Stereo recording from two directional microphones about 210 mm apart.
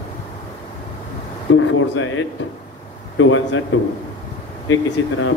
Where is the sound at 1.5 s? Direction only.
70° left (ahead or behind).